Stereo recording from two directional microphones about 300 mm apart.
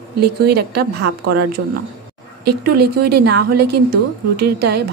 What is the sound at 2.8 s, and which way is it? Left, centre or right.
A woman's voice, right.